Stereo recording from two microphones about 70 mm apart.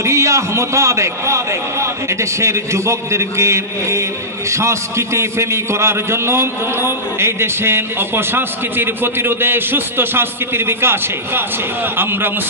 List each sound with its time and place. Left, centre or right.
0.0 s a man's voice: right